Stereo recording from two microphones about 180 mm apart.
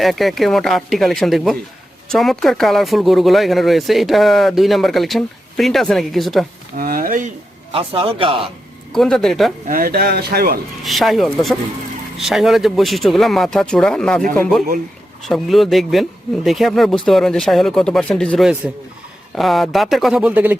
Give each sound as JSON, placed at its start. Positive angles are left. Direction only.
{"t": 0.0, "sound": "speech", "side_deg": 0}
{"t": 6.7, "sound": "speech", "side_deg": -55}
{"t": 7.7, "sound": "speech", "side_deg": -30}
{"t": 8.9, "sound": "speech", "side_deg": 0}
{"t": 9.6, "sound": "speech", "side_deg": -55}
{"t": 10.8, "sound": "speech", "side_deg": 0}